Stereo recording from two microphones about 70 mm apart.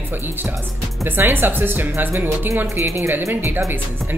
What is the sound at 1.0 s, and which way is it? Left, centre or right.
Speech, right.